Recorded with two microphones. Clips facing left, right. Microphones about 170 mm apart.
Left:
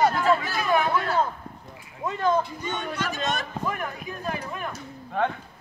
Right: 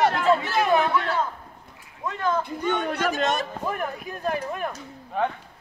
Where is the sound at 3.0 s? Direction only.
45° right (ahead or behind).